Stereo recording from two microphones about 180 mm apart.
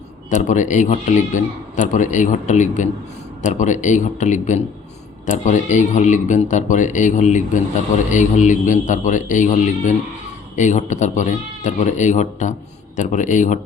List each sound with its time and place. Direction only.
0.3 s speech: 45° left (ahead or behind)